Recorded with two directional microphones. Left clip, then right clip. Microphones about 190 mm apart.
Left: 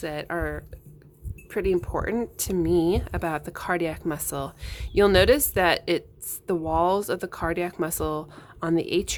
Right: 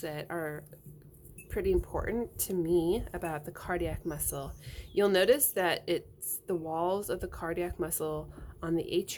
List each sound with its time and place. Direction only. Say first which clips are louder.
0.0 s speech: left 7 dB; 25° left (ahead or behind)